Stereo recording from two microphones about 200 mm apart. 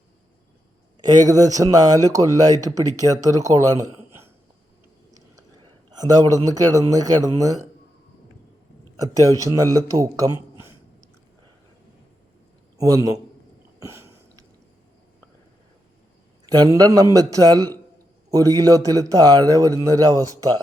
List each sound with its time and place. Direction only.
1.2 s speech: 15° right (ahead or behind)
5.6 s a man's voice: 20° right (ahead or behind)
9.0 s speech: 15° right (ahead or behind)
12.7 s a man's voice: 15° right (ahead or behind)
13.7 s a sound: 15° right (ahead or behind)
16.5 s speech: 20° right (ahead or behind)